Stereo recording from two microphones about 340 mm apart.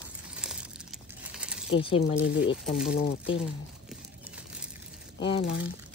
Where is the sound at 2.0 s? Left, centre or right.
Left.